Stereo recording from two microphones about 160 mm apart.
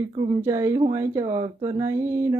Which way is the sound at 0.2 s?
20° right (ahead or behind).